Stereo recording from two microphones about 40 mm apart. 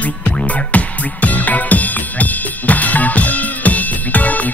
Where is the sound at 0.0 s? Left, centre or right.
Left.